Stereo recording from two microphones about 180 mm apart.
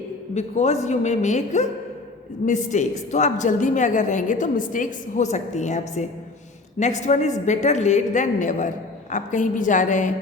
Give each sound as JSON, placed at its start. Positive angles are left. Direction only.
{"t": 0.3, "sound": "a woman's voice", "side_deg": 40}